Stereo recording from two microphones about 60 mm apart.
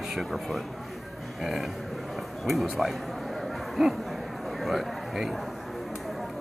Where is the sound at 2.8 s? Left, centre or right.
Centre.